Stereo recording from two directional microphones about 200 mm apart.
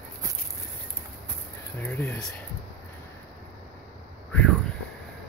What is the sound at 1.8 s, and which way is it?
Speech, 10° left (ahead or behind).